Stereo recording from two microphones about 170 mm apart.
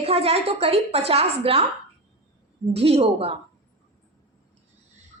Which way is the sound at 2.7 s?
35° right (ahead or behind).